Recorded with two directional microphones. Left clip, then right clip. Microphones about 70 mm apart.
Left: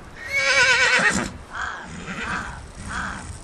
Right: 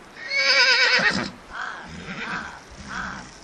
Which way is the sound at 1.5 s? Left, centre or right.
Centre.